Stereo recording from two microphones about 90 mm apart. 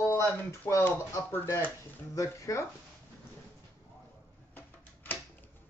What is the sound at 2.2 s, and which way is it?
Speech, 35° left (ahead or behind).